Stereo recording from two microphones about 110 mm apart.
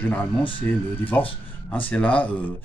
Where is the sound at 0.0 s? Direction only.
15° left (ahead or behind).